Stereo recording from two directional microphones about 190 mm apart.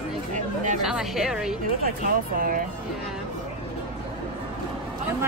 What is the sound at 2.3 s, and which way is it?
Speech, 50° right (ahead or behind).